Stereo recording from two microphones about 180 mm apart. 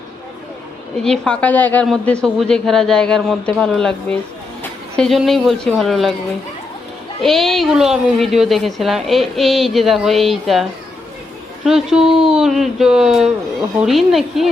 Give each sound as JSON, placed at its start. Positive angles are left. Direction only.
{"t": 1.0, "sound": "a woman's voice", "side_deg": 5}
{"t": 7.2, "sound": "a woman's voice", "side_deg": 0}